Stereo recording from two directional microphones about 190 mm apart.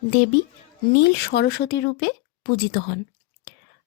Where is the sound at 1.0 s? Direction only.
60° left (ahead or behind).